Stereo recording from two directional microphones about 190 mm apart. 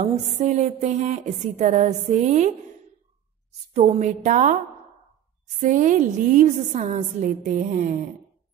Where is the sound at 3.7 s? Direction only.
35° right (ahead or behind).